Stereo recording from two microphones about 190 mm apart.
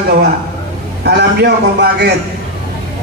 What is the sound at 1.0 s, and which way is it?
A man's voice, 60° right (ahead or behind).